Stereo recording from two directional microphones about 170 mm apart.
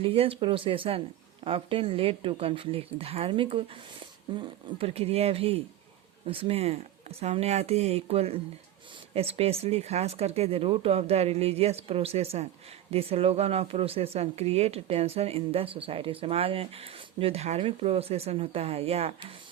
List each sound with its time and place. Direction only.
0.0 s speech: 35° right (ahead or behind)